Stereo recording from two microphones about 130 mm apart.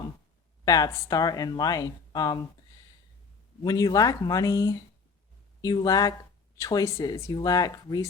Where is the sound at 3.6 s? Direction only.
30° left (ahead or behind).